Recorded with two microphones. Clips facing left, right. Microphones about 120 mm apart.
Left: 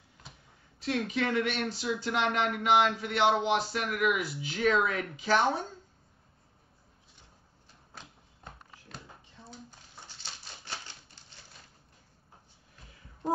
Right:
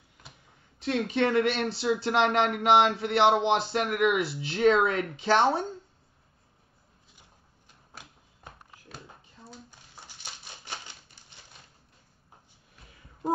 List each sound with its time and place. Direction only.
0.7 s speech: 25° right (ahead or behind)
10.0 s typewriter: 15° right (ahead or behind)